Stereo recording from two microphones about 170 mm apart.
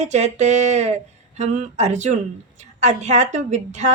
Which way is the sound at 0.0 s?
40° right (ahead or behind).